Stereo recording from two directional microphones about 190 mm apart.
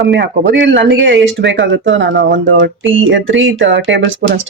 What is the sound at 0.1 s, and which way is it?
Speech, 70° right (ahead or behind).